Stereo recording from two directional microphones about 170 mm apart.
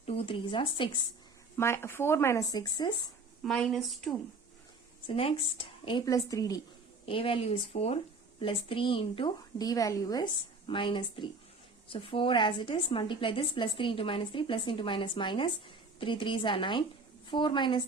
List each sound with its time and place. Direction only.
0.0 s speech: 35° left (ahead or behind)
1.5 s speech: 15° left (ahead or behind)
3.4 s a woman's voice: centre (ahead or behind)
5.0 s a woman's voice: 30° left (ahead or behind)
7.0 s a woman's voice: 35° left (ahead or behind)